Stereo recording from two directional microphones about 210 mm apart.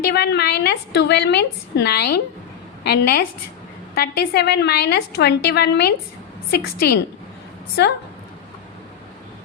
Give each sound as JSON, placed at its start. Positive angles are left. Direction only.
{"t": 0.1, "sound": "a woman's voice", "side_deg": 50}